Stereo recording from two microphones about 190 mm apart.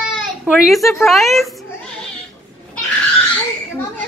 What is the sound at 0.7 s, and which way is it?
Speech, centre (ahead or behind).